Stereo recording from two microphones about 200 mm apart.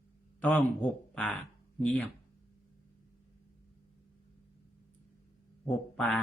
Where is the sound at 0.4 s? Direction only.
5° left (ahead or behind).